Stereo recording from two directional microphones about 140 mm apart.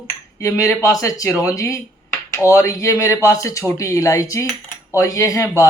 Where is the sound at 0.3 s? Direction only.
20° left (ahead or behind).